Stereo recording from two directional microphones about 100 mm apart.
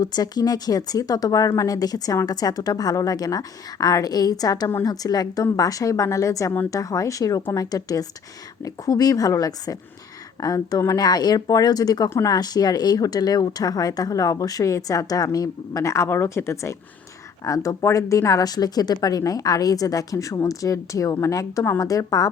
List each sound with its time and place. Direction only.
0.0 s speech: 40° left (ahead or behind)